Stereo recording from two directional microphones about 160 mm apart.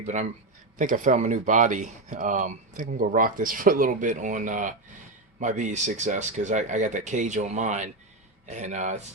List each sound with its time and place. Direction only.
0.0 s speech: 45° right (ahead or behind)